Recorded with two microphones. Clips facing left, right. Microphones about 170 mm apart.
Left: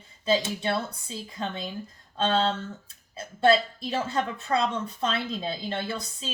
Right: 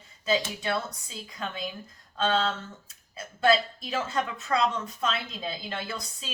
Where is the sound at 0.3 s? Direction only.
30° left (ahead or behind).